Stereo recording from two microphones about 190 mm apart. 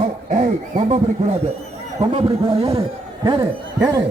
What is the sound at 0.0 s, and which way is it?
Speech, 40° right (ahead or behind).